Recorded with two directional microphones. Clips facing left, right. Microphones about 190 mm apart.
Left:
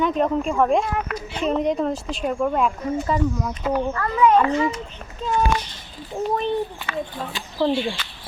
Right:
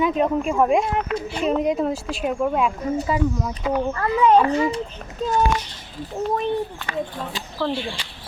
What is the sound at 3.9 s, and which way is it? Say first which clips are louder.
Speech: right 1 dB; 30° right (ahead or behind).